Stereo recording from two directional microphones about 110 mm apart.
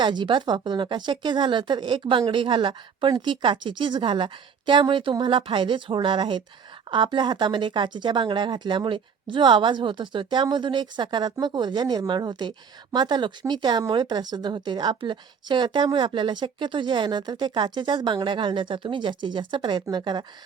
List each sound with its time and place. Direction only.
0.0 s a woman's voice: 45° right (ahead or behind)